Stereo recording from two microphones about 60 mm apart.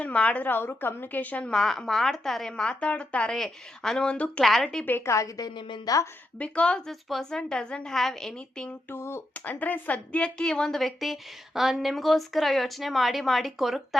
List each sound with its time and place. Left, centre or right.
0.0 s a woman's voice: centre
0.4 s a woman's voice: left
1.4 s a woman's voice: centre
3.3 s a woman's voice: centre
4.4 s a woman's voice: centre
5.0 s a woman's voice: left
6.4 s a woman's voice: centre
8.9 s speech: left
9.3 s a woman's voice: left; by 13.8 s centre